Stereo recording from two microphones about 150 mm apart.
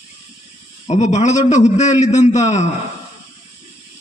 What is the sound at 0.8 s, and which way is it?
A man's voice, 50° left (ahead or behind).